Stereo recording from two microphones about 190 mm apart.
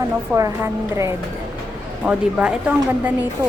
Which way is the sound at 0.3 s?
15° right (ahead or behind).